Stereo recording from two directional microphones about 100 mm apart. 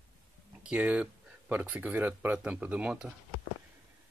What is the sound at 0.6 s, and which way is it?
Speech, 10° right (ahead or behind).